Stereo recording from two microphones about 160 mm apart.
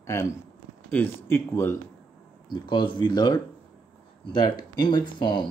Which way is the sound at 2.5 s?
25° left (ahead or behind).